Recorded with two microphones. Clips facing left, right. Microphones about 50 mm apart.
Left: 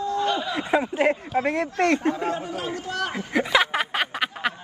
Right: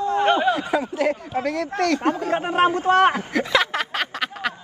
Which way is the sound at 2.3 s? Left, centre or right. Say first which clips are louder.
Right 10 dB; right.